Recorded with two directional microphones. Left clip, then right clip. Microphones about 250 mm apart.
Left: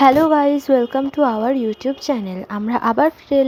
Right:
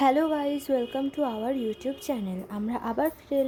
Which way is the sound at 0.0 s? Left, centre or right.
Centre.